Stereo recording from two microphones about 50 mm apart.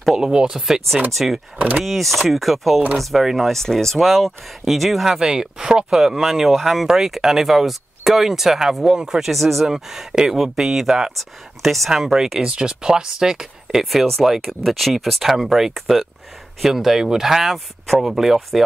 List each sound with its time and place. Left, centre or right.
0.0 s speech: centre
0.3 s speech: centre
0.6 s speech: centre
5.1 s speech: centre
9.3 s speech: centre
12.4 s speech: centre
13.8 s speech: centre